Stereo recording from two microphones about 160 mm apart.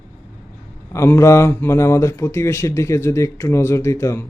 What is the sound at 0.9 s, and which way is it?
Speech, 15° left (ahead or behind).